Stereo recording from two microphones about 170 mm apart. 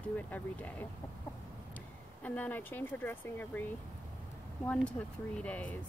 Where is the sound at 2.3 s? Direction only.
10° left (ahead or behind).